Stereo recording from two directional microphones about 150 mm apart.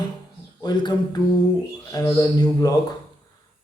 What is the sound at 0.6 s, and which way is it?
Speech, 30° left (ahead or behind).